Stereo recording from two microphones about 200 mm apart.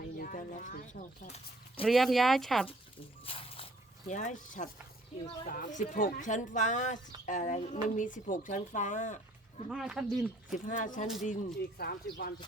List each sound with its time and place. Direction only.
0.2 s a woman's voice: 40° left (ahead or behind)
1.8 s speech: centre (ahead or behind)
3.2 s a sound: 30° left (ahead or behind)
5.1 s speech: 25° left (ahead or behind)
5.5 s a woman's voice: 45° left (ahead or behind)
9.6 s speech: centre (ahead or behind)
10.7 s a woman's voice: 40° left (ahead or behind)
11.8 s speech: 50° left (ahead or behind)